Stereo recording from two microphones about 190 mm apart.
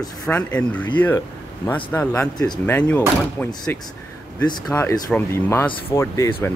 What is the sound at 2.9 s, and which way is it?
Speech, 5° left (ahead or behind).